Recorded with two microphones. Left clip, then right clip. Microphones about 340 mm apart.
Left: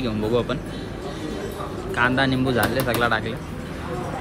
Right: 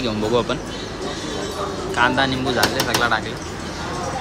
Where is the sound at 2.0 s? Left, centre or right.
Centre.